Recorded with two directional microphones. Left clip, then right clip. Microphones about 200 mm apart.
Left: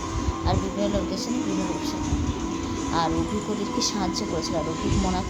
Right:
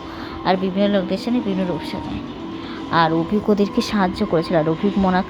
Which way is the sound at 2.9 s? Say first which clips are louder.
Right 8 dB; 30° right (ahead or behind).